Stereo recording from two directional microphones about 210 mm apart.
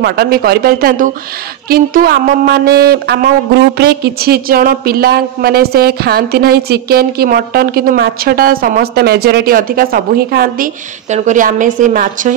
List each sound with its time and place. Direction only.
0.0 s a woman's voice: 50° right (ahead or behind)